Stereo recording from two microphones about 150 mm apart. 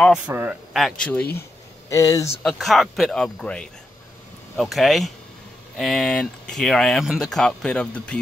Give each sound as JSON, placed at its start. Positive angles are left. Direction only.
{"t": 0.3, "sound": "speech", "side_deg": -15}
{"t": 0.7, "sound": "speech", "side_deg": 5}
{"t": 1.9, "sound": "speech", "side_deg": 20}
{"t": 2.4, "sound": "speech", "side_deg": 0}